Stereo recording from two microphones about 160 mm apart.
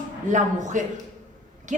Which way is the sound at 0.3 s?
50° right (ahead or behind).